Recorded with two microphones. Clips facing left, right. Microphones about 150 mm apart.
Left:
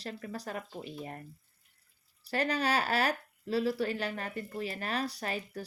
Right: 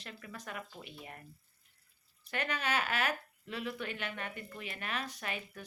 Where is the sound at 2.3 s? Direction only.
35° left (ahead or behind).